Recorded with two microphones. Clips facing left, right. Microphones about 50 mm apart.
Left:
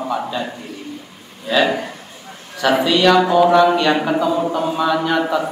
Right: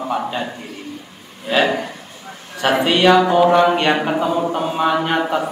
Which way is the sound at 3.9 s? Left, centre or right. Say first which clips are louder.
Left 1 dB; centre.